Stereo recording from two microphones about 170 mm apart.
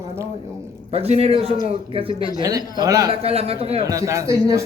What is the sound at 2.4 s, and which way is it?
Speech, 20° right (ahead or behind).